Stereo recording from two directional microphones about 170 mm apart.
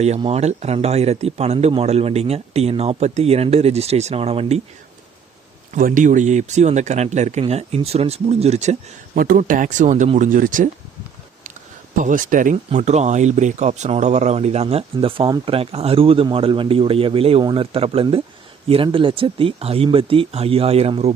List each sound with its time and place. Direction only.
0.2 s speech: 40° right (ahead or behind)
5.7 s speech: 50° right (ahead or behind)
9.1 s speech: 50° right (ahead or behind)
11.9 s speech: 50° right (ahead or behind)